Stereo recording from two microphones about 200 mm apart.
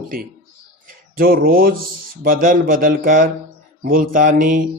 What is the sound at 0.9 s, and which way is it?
A man's voice, 45° right (ahead or behind).